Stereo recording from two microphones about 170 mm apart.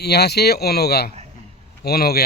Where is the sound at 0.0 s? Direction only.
70° left (ahead or behind).